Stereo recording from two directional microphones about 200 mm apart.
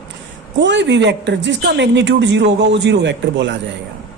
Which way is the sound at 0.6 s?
65° right (ahead or behind).